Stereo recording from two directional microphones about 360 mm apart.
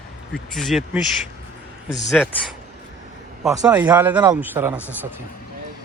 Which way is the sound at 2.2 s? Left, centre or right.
Centre.